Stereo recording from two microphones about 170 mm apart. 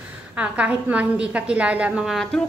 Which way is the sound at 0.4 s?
5° right (ahead or behind).